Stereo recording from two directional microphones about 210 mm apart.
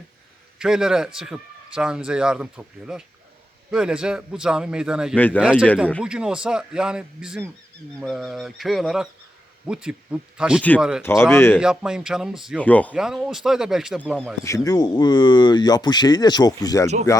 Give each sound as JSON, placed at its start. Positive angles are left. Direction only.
{"t": 0.6, "sound": "speech", "side_deg": -5}
{"t": 5.1, "sound": "speech", "side_deg": 10}
{"t": 5.4, "sound": "speech", "side_deg": -5}
{"t": 11.0, "sound": "speech", "side_deg": 10}
{"t": 11.6, "sound": "speech", "side_deg": -5}
{"t": 14.4, "sound": "speech", "side_deg": 15}